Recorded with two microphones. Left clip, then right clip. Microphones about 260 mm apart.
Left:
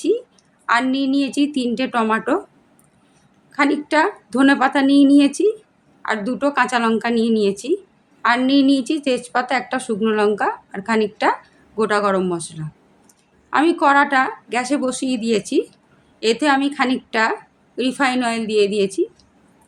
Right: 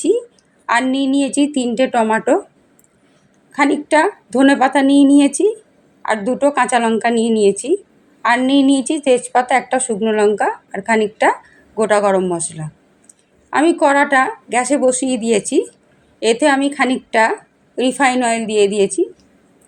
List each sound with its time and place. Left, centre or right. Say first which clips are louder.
0.7 s a woman's voice: right 2 dB; centre
3.5 s a woman's voice: right 3 dB; centre